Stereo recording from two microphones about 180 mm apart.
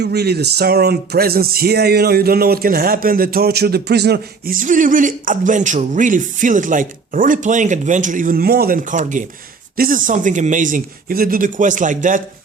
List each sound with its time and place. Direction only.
0.0 s speech: 65° right (ahead or behind); by 12.2 s 45° right (ahead or behind)